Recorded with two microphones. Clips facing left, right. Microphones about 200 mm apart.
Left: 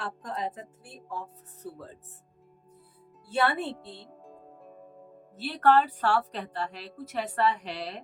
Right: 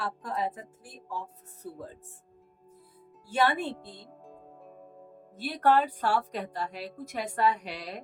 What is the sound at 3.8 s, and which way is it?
Speech, 10° right (ahead or behind).